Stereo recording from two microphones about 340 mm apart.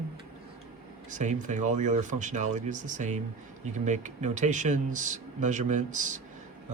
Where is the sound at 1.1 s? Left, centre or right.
Right.